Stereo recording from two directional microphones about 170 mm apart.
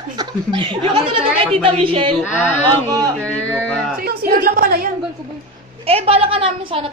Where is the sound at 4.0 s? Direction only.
60° right (ahead or behind).